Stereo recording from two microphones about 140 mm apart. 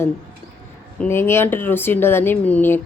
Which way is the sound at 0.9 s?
15° left (ahead or behind).